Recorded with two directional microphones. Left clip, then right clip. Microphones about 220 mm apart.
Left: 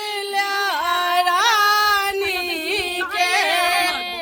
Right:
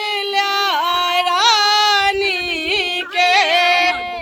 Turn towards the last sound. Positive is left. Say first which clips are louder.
# right 4 dB
turn(degrees=0)  # may be behind; listen again after turning